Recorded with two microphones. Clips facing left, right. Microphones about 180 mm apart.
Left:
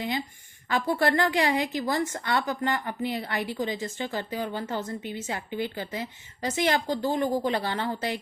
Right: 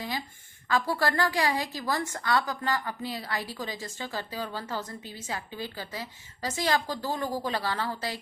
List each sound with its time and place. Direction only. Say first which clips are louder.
0.7 s a woman's voice: left 3 dB; 25° left (ahead or behind)